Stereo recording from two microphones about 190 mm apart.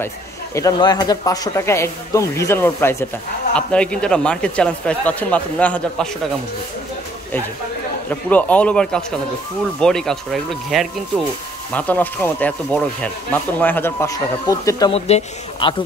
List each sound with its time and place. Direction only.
0.6 s a man's voice: 20° left (ahead or behind)
8.1 s a man's voice: 10° left (ahead or behind)
14.9 s speech: 35° left (ahead or behind)